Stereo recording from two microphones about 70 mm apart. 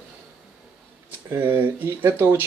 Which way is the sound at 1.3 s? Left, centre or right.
Right.